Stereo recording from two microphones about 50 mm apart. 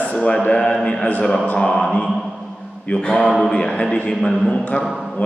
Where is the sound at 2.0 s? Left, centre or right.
Centre.